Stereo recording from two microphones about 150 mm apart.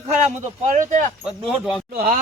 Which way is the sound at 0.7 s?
55° right (ahead or behind).